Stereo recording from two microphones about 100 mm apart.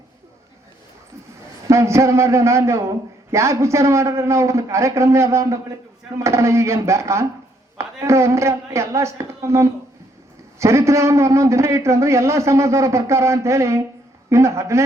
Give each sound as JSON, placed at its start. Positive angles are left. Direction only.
{"t": 1.7, "sound": "a man's voice", "side_deg": -30}